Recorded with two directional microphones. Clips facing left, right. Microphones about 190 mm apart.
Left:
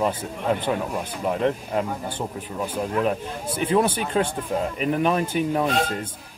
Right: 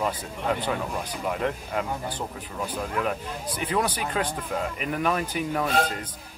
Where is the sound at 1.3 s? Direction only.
25° left (ahead or behind).